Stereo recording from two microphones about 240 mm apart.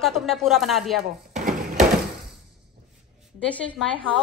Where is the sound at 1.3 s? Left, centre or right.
Right.